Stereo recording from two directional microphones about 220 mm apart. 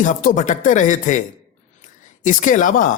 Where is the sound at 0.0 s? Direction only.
35° left (ahead or behind).